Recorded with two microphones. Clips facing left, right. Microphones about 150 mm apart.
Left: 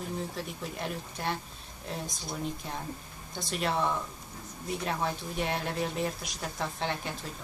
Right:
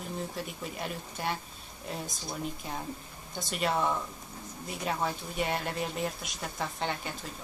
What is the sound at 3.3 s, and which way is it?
Speech, centre (ahead or behind).